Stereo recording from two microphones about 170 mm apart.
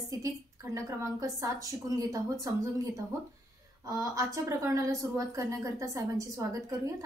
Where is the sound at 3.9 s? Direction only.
20° right (ahead or behind).